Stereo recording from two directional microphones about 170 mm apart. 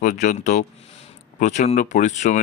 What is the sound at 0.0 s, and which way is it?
Speech, 45° left (ahead or behind).